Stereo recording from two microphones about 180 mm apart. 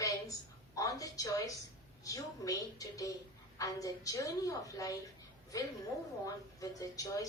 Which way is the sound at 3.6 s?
20° left (ahead or behind).